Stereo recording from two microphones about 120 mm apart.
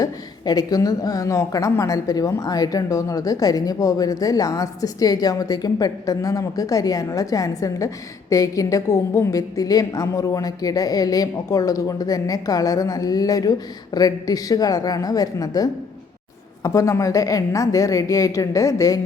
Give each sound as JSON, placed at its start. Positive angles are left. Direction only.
{"t": 0.0, "sound": "a woman's voice", "side_deg": 30}